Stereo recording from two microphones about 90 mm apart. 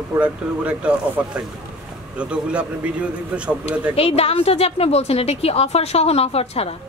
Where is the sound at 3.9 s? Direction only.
90° left.